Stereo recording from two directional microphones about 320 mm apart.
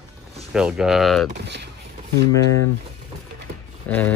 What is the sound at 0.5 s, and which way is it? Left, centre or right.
Speech, centre.